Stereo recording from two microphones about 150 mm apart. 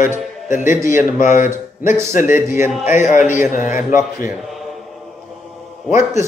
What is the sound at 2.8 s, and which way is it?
Speech, 55° left (ahead or behind).